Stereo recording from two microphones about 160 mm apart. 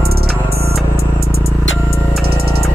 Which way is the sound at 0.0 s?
75° right (ahead or behind).